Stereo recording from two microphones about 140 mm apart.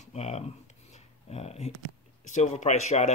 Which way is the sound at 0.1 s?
50° left (ahead or behind).